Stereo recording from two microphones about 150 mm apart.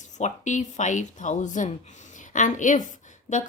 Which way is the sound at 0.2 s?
50° left (ahead or behind).